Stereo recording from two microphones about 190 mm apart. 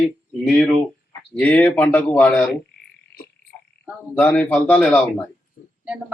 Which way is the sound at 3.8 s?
5° left (ahead or behind).